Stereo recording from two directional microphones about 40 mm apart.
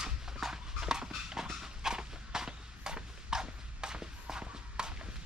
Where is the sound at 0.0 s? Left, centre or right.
Centre.